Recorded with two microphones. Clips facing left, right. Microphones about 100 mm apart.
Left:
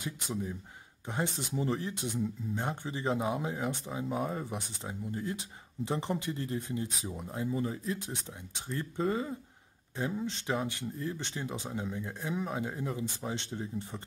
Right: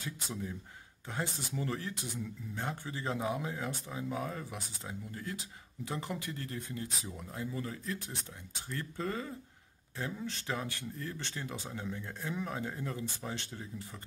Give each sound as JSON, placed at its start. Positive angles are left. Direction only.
{"t": 0.0, "sound": "speech", "side_deg": 15}